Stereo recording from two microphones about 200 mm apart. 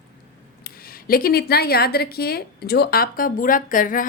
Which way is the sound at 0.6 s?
50° left (ahead or behind).